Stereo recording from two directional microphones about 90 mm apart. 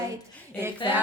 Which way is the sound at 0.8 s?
60° left (ahead or behind).